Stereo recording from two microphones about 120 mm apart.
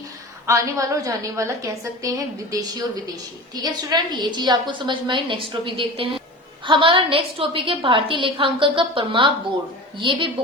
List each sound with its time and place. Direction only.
0.4 s a woman's voice: 25° right (ahead or behind); by 10.2 s 45° right (ahead or behind)